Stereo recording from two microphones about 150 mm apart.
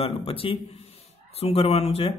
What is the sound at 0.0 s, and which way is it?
Speech, 40° left (ahead or behind).